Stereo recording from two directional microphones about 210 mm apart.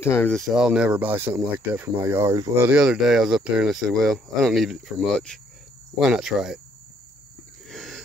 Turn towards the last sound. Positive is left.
turn(degrees=0)  # may be behind; listen again after turning